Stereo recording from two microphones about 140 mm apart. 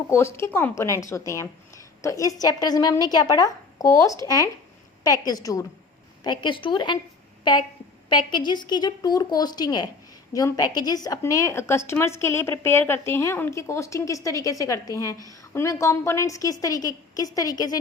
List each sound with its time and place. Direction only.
0.1 s a woman's voice: 20° left (ahead or behind)
8.1 s a woman's voice: 35° left (ahead or behind)